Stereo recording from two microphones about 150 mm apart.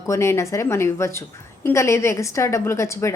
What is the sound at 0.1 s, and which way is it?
A woman's voice, 20° left (ahead or behind).